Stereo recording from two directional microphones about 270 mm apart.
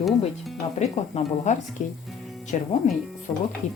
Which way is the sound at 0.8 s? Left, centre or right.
Left.